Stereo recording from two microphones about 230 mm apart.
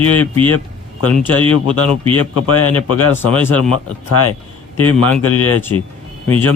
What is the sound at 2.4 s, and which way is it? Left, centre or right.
Speech, left.